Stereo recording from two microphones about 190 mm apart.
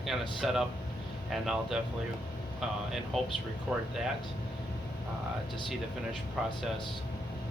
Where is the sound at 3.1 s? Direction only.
Centre (ahead or behind).